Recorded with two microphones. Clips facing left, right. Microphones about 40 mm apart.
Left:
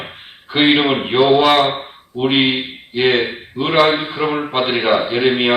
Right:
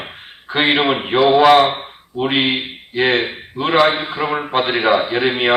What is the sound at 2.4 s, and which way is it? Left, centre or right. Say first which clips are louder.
A man's voice: left 1 dB; centre.